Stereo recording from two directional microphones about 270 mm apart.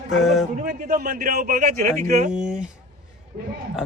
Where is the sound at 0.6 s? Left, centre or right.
Right.